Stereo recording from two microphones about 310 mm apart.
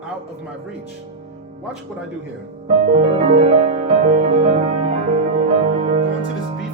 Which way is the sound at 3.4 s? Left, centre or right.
Centre.